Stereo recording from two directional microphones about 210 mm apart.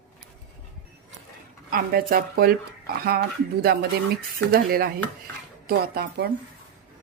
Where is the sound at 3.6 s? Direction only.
50° right (ahead or behind).